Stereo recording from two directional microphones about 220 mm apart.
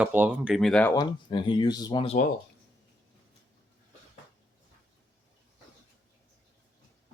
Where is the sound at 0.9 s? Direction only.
20° left (ahead or behind).